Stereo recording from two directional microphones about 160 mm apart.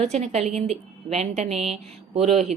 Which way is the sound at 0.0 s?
45° right (ahead or behind).